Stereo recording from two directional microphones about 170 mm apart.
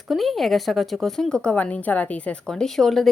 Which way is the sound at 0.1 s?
Centre (ahead or behind).